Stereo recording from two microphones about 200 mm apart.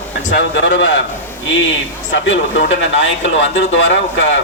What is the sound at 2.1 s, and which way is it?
Speech, 65° left (ahead or behind).